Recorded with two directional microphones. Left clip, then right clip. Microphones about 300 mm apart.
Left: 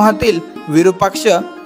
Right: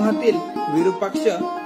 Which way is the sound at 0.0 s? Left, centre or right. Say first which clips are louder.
Left 7 dB; left.